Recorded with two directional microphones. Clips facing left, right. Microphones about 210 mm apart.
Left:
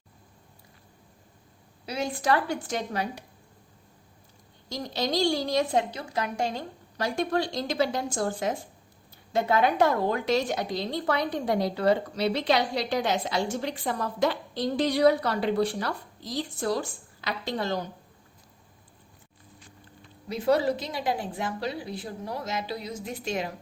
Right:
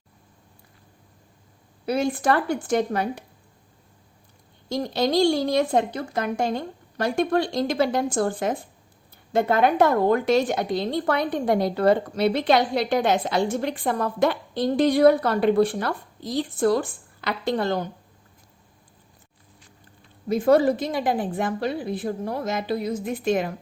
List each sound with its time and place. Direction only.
1.9 s a woman's voice: 50° right (ahead or behind)
4.7 s a woman's voice: 55° right (ahead or behind)
20.2 s a woman's voice: 50° right (ahead or behind)